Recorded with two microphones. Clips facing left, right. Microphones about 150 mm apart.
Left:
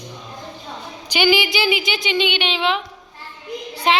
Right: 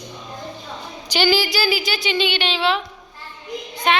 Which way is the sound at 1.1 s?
10° left (ahead or behind).